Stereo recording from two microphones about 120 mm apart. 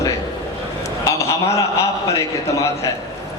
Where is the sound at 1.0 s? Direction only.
25° left (ahead or behind).